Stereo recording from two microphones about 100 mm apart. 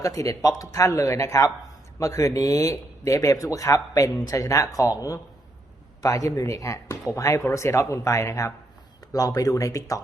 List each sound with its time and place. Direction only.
0.0 s speech: 35° left (ahead or behind)